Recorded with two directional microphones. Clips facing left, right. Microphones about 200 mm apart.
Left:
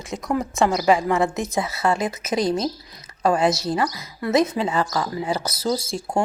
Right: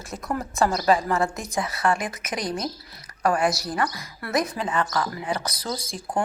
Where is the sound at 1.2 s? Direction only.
20° left (ahead or behind).